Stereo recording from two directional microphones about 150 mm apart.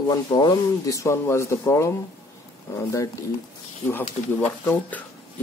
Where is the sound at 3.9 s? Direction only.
10° left (ahead or behind).